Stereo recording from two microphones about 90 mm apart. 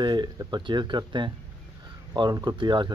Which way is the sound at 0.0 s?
55° right (ahead or behind).